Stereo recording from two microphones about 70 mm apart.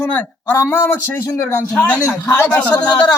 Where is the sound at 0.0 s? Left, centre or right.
Left.